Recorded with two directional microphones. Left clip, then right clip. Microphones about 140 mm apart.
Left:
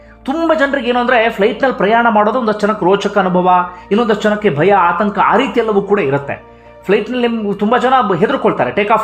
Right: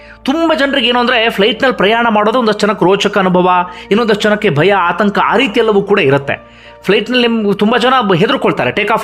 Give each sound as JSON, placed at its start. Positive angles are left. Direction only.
{"t": 0.3, "sound": "speech", "side_deg": -10}